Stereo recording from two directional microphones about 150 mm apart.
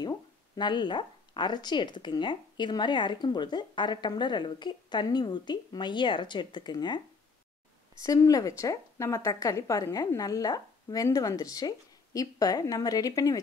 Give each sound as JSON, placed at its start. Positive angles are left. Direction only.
{"t": 0.0, "sound": "speech", "side_deg": 30}
{"t": 8.0, "sound": "speech", "side_deg": 25}